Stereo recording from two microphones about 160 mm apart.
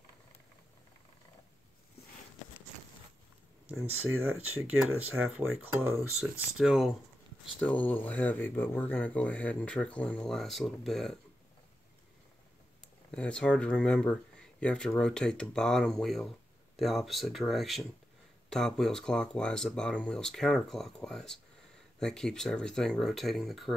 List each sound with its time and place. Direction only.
4.6 s speech: 5° right (ahead or behind)
5.7 s speech: 15° right (ahead or behind)
5.9 s speech: centre (ahead or behind)
7.5 s speech: 10° left (ahead or behind)
13.1 s speech: 5° left (ahead or behind)